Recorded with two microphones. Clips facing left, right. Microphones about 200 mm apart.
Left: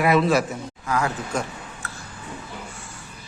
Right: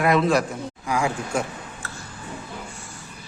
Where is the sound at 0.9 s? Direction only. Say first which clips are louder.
Even; 10° right (ahead or behind).